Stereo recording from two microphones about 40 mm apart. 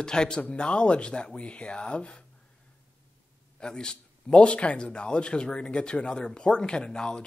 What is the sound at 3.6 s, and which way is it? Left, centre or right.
A man's voice, left.